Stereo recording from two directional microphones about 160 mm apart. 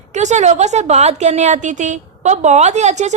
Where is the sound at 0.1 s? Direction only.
45° right (ahead or behind).